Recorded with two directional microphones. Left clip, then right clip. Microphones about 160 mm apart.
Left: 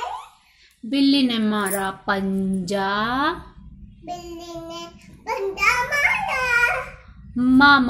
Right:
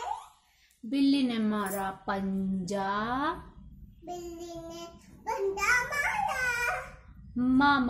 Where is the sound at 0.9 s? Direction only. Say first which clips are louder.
Left 8 dB; centre (ahead or behind).